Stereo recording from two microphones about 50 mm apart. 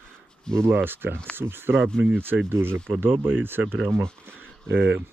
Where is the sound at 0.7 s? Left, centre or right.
Right.